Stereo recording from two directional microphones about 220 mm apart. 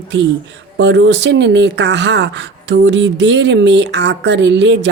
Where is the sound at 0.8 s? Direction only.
55° right (ahead or behind).